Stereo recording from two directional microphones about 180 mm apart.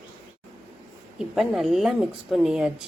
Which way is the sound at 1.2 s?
Centre (ahead or behind).